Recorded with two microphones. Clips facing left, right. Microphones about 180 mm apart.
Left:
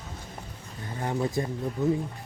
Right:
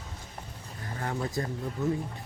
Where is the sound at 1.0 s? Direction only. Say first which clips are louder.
Left 4 dB; 20° left (ahead or behind).